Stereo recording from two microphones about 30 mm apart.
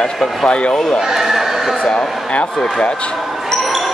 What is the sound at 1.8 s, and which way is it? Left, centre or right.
Speech, left.